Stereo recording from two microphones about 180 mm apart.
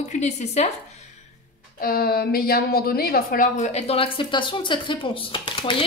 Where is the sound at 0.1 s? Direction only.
40° left (ahead or behind).